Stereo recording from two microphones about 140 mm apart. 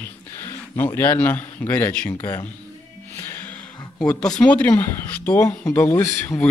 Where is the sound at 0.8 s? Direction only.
15° left (ahead or behind).